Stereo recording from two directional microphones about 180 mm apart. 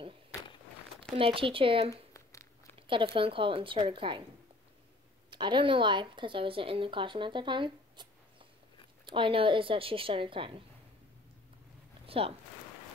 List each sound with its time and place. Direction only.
1.1 s a woman's voice: 30° right (ahead or behind)
1.9 s a sound: 15° left (ahead or behind)
2.9 s a woman's voice: 30° right (ahead or behind)
5.3 s a woman's voice: 25° right (ahead or behind)
12.1 s speech: 30° right (ahead or behind)